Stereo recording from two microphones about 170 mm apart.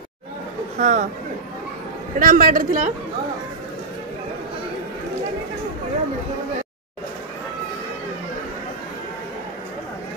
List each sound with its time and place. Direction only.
0.7 s speech: 45° right (ahead or behind)
2.1 s a man's voice: 55° right (ahead or behind)